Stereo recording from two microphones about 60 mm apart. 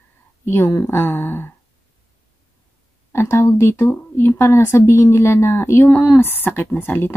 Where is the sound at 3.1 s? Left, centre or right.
Left.